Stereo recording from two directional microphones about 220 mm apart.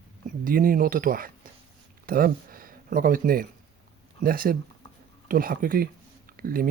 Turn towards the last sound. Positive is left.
turn(degrees=-40)  # may be behind; listen again after turning